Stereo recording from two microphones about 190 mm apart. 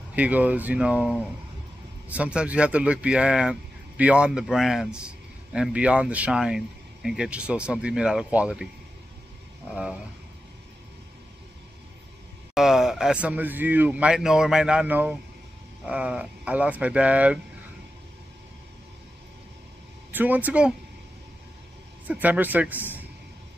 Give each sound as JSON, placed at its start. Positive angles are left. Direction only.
{"t": 0.1, "sound": "speech", "side_deg": -5}
{"t": 12.5, "sound": "speech", "side_deg": 0}
{"t": 20.1, "sound": "speech", "side_deg": -10}
{"t": 22.0, "sound": "speech", "side_deg": -10}